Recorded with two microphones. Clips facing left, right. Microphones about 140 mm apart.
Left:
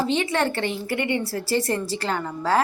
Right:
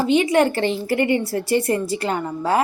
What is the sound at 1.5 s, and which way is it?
Speech, 15° right (ahead or behind).